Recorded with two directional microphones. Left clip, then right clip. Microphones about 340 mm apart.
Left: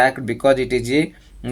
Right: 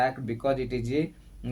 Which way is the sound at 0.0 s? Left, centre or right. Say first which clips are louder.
Left 11 dB; right.